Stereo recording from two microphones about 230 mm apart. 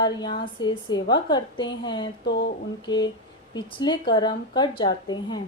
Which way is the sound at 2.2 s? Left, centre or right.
Left.